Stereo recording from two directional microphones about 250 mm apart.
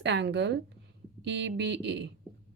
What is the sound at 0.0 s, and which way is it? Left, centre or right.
A woman's voice, right.